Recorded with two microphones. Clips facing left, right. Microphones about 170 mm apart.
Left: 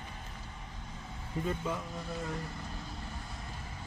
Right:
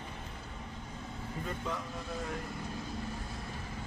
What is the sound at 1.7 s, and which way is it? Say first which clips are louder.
Speech: left 1 dB; 5° left (ahead or behind).